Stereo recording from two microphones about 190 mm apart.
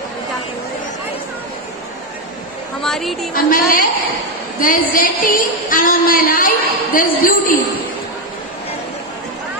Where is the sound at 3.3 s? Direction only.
45° left (ahead or behind).